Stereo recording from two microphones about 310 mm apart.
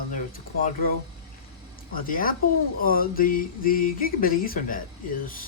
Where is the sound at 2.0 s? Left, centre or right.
Left.